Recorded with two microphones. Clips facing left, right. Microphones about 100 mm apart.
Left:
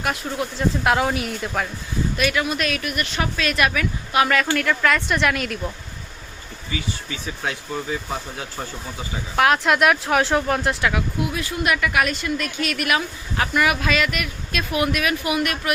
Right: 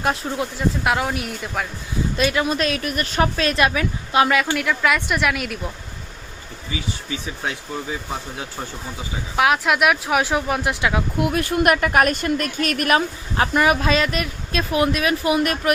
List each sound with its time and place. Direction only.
0.0 s speech: 30° right (ahead or behind)
0.9 s speech: centre (ahead or behind)
2.1 s speech: 30° right (ahead or behind)
4.4 s speech: 15° right (ahead or behind)
9.3 s speech: 5° right (ahead or behind)
11.2 s speech: 55° right (ahead or behind); by 15.7 s 35° right (ahead or behind)